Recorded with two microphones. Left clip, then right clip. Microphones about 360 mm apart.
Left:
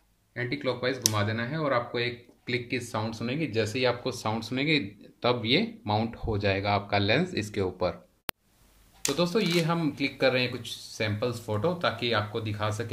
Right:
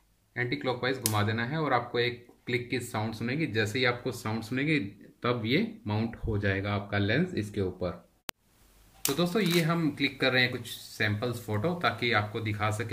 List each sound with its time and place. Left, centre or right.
0.3 s speech: centre
8.3 s a sound: centre
9.0 s speech: centre